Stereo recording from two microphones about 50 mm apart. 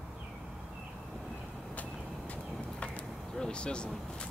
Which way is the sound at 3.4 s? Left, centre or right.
Centre.